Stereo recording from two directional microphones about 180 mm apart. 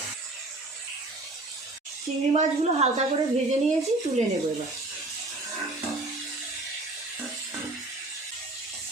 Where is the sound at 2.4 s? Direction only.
35° right (ahead or behind).